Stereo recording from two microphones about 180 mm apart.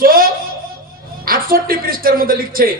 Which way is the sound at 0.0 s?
55° right (ahead or behind).